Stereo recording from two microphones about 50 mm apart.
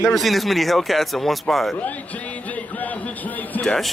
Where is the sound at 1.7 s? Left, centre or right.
Left.